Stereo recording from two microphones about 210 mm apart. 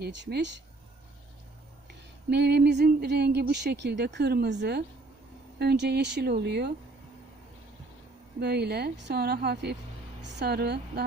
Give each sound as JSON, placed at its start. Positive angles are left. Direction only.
{"t": 0.0, "sound": "speech", "side_deg": -55}
{"t": 2.3, "sound": "a woman's voice", "side_deg": -50}
{"t": 8.4, "sound": "a woman's voice", "side_deg": -50}